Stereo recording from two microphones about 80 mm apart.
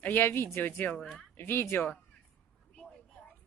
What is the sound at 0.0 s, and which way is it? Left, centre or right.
Speech, left.